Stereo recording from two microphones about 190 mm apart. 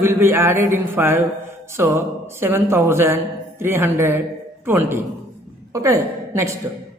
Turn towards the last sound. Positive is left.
turn(degrees=-15)  # may be behind; listen again after turning